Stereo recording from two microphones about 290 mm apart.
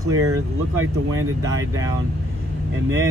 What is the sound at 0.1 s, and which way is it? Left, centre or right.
Speech, right.